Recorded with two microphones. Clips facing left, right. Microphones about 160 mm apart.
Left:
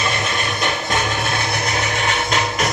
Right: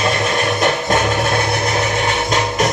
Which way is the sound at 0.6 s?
50° right (ahead or behind).